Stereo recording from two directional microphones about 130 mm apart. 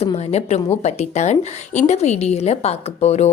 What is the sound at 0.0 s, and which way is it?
Speech, 50° left (ahead or behind).